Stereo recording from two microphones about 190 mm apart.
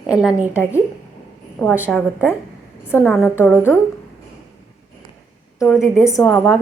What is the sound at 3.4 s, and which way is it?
Speech, 10° left (ahead or behind).